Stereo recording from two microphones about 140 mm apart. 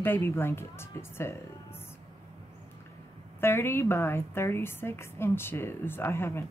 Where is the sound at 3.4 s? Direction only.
15° left (ahead or behind).